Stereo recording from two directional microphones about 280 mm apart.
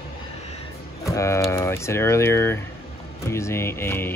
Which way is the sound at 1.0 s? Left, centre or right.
Centre.